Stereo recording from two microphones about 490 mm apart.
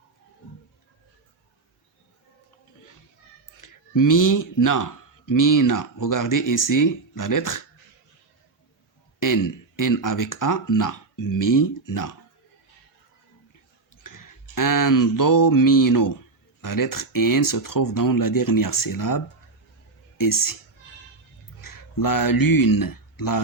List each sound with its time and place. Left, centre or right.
3.6 s speech: left
9.2 s speech: left
14.0 s a sound: left
16.6 s speech: left
21.6 s speech: left